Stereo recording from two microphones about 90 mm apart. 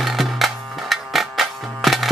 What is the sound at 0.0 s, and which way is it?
Music, centre (ahead or behind).